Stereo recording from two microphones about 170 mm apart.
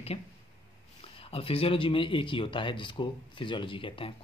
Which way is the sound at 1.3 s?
35° left (ahead or behind).